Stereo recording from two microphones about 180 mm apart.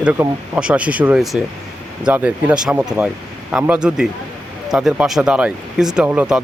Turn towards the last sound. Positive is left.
turn(degrees=-5)  # may be behind; listen again after turning